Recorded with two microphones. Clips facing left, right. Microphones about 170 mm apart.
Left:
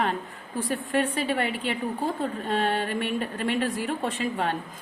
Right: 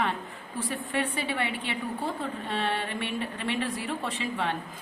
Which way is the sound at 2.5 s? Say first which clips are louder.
Left 5 dB; 45° left (ahead or behind).